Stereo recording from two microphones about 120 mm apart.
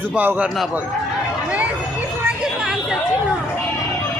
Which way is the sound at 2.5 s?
5° right (ahead or behind).